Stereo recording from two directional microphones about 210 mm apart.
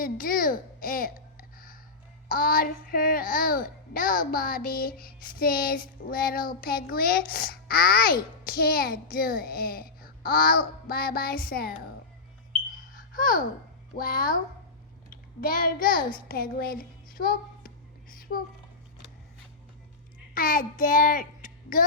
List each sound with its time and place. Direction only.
0.0 s babbling: 40° left (ahead or behind)
2.3 s a child's voice: 40° left (ahead or behind)
12.7 s a sound: 40° left (ahead or behind)
13.9 s a child's voice: 45° left (ahead or behind)
18.1 s a sound: 45° left (ahead or behind)
20.3 s a child's voice: 40° left (ahead or behind)